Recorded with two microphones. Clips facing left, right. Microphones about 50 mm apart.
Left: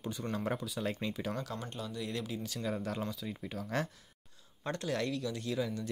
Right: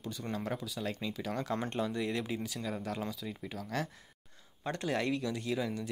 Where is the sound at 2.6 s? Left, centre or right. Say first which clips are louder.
Left 1 dB; centre.